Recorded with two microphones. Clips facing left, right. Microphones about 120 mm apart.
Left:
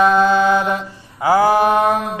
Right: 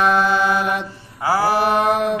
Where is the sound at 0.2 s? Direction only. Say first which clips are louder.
Left 4 dB; 20° left (ahead or behind).